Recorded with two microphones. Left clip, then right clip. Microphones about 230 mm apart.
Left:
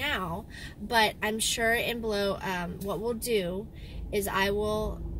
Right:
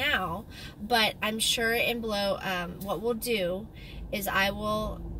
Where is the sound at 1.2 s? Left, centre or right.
Centre.